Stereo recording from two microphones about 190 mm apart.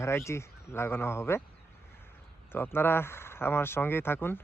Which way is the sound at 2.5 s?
10° left (ahead or behind).